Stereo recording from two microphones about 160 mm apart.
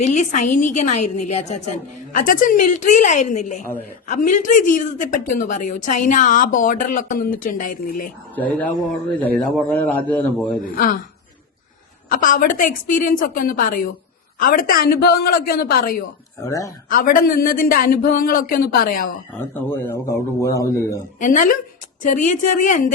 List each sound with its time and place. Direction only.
0.0 s a woman's voice: 45° left (ahead or behind)
2.1 s a woman's voice: 60° left (ahead or behind)
8.4 s speech: 10° left (ahead or behind)
12.1 s a woman's voice: 60° left (ahead or behind)
16.4 s speech: 20° left (ahead or behind)
16.9 s a woman's voice: 60° left (ahead or behind)
19.3 s speech: 10° left (ahead or behind)
21.2 s a woman's voice: 55° left (ahead or behind)